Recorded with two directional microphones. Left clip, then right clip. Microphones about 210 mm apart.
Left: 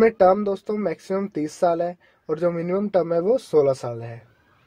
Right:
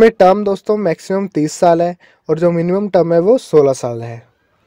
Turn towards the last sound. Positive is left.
turn(degrees=-35)  # may be behind; listen again after turning